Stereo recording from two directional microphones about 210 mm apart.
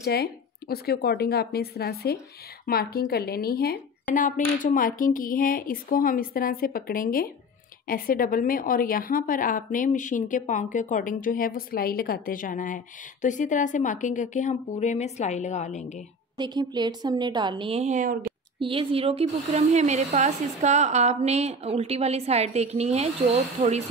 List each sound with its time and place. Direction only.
0.0 s a woman's voice: 50° left (ahead or behind)
16.3 s a woman's voice: 20° right (ahead or behind)
18.6 s speech: 25° right (ahead or behind)